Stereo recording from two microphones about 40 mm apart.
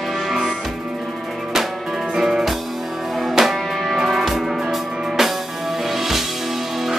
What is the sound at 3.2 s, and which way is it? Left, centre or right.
Music, centre.